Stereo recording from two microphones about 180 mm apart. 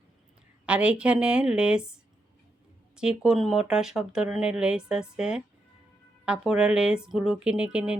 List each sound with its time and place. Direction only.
0.6 s speech: 5° right (ahead or behind)